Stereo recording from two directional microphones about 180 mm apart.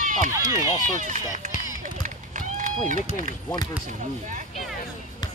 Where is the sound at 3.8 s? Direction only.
45° right (ahead or behind).